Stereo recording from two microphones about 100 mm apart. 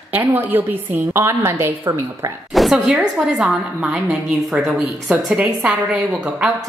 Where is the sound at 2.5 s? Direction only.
5° right (ahead or behind).